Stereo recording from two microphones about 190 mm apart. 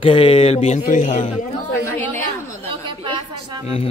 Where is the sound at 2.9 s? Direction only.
25° right (ahead or behind).